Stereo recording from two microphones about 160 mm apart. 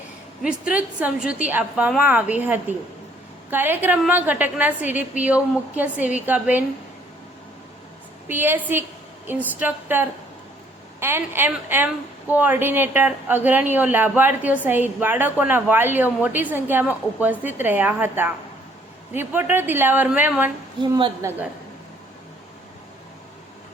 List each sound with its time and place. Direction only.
0.4 s speech: 5° right (ahead or behind)
8.3 s speech: 10° right (ahead or behind)
20.9 s a woman's voice: 20° right (ahead or behind)